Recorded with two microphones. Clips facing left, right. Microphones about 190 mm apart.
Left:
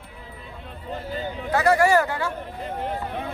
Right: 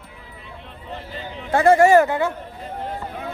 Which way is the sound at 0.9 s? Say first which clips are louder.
Left 3 dB; 45° left (ahead or behind).